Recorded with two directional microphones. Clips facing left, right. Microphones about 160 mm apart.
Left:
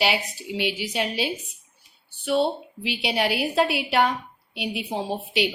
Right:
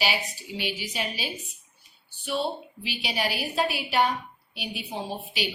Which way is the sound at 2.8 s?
90° left.